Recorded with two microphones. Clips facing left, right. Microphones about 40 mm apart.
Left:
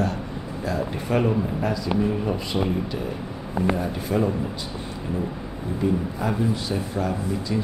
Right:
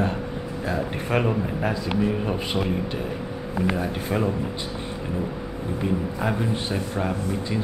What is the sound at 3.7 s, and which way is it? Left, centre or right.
Speech, right.